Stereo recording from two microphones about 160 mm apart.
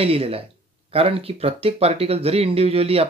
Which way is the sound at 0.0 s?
35° right (ahead or behind).